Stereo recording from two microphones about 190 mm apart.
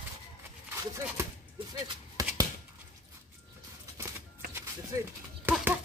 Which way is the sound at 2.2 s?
20° right (ahead or behind).